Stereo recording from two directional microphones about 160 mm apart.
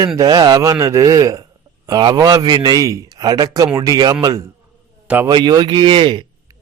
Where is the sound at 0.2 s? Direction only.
25° right (ahead or behind).